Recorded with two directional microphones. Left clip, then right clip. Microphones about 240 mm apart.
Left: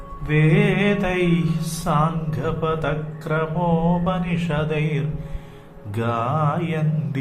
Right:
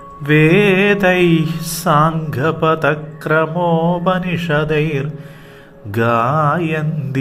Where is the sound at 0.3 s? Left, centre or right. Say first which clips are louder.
Right 9 dB; right.